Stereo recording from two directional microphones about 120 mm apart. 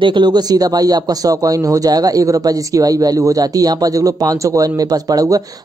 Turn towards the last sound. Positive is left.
turn(degrees=-30)  # may be behind; listen again after turning